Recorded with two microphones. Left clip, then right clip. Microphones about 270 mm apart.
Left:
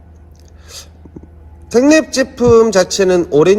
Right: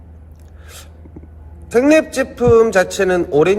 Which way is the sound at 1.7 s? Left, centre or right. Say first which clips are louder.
Left 2 dB; left.